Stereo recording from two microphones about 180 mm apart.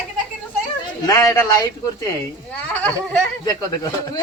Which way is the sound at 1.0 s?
20° left (ahead or behind).